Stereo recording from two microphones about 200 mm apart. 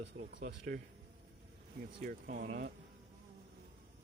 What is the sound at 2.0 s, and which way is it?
Speech, 45° right (ahead or behind).